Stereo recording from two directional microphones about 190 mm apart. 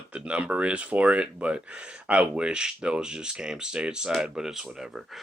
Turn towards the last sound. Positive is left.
turn(degrees=0)  # may be behind; listen again after turning